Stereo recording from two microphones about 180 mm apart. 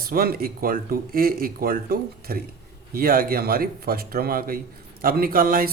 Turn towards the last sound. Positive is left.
turn(degrees=-50)  # may be behind; listen again after turning